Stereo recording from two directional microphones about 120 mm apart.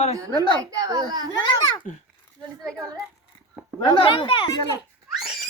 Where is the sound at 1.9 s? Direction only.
90° left.